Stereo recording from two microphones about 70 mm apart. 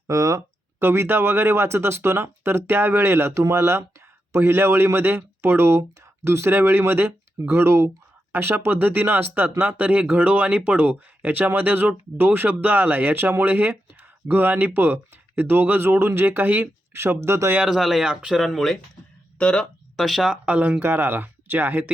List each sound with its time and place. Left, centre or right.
0.1 s speech: right
0.8 s speech: right
17.6 s speech: centre
20.0 s speech: centre
20.3 s speech: centre